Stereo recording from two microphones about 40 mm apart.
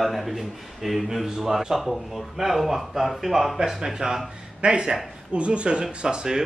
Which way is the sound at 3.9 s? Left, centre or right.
Centre.